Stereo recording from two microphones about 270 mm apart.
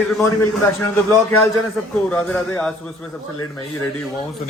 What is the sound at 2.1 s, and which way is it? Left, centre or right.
Speech, centre.